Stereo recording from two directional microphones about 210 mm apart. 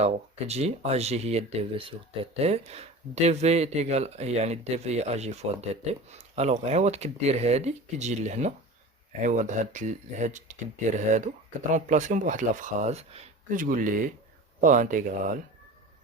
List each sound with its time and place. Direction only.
0.0 s speech: 30° right (ahead or behind)